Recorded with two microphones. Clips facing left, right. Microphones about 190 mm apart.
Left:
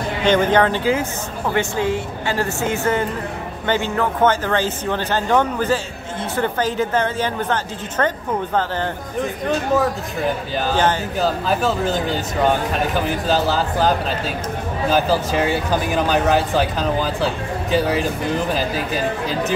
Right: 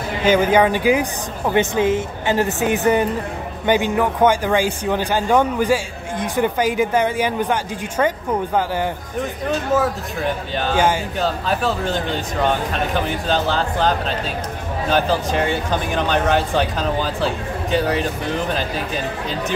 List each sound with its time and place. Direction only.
0.2 s a man's voice: 10° right (ahead or behind)
9.8 s speech: centre (ahead or behind)